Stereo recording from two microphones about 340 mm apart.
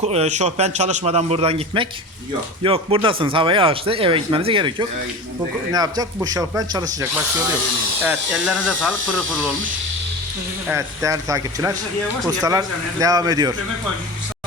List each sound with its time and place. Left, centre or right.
0.0 s a man's voice: centre
10.7 s speech: centre